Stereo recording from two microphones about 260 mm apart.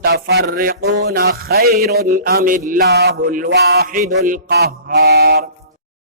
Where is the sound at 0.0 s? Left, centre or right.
Right.